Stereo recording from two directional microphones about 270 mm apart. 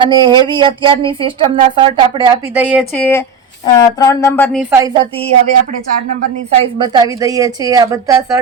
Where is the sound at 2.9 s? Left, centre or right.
Centre.